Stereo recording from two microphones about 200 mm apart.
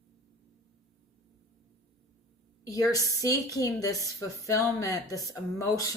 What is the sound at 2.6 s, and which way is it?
A woman's voice, 15° left (ahead or behind).